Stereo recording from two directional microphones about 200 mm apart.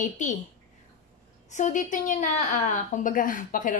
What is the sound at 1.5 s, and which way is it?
A woman's voice, 40° left (ahead or behind).